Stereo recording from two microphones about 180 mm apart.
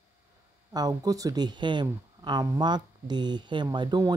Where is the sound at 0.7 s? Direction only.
20° right (ahead or behind).